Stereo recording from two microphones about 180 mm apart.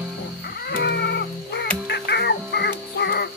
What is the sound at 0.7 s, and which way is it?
Music, 65° left (ahead or behind).